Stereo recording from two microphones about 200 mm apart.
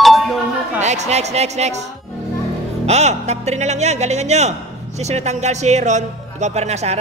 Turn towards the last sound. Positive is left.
turn(degrees=-35)  # may be behind; listen again after turning